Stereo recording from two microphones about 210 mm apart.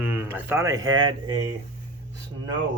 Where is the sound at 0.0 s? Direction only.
10° right (ahead or behind).